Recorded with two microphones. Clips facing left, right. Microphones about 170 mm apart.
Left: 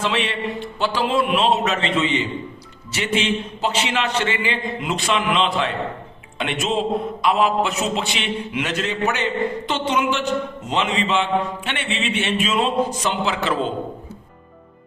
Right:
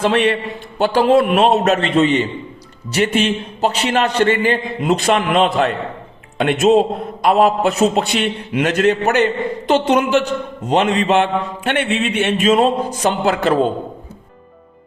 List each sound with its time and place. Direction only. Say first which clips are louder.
0.0 s a man's voice: right 7 dB; 55° right (ahead or behind)
2.0 s a woman's voice: right 7 dB; 40° right (ahead or behind); by 9.2 s 60° right (ahead or behind)
9.6 s a woman's voice: right 11 dB; 40° right (ahead or behind)